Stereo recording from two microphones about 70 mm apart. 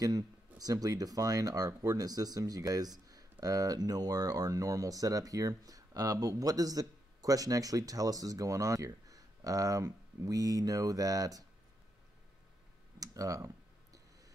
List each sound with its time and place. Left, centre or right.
0.0 s speech: right
13.0 s computer keyboard: right